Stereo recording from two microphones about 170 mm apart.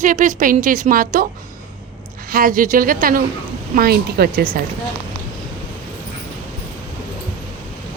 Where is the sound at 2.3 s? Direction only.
55° right (ahead or behind).